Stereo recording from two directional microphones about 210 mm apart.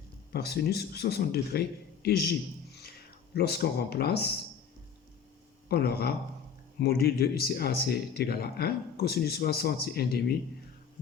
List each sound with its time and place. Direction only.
0.3 s speech: 50° left (ahead or behind)
3.3 s speech: 50° left (ahead or behind)
5.6 s speech: 50° left (ahead or behind)